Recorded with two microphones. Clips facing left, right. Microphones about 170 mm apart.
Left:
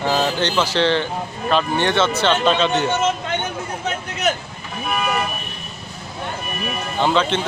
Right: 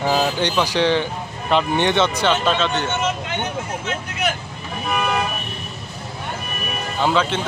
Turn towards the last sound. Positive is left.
turn(degrees=-5)  # may be behind; listen again after turning